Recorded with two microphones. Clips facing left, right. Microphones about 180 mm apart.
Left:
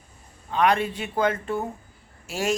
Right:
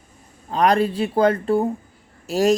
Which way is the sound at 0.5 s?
35° right (ahead or behind).